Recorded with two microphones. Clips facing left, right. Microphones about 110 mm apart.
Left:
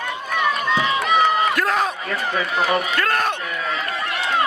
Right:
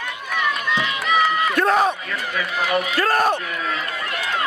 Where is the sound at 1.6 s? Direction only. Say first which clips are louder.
Right 3 dB; 10° right (ahead or behind).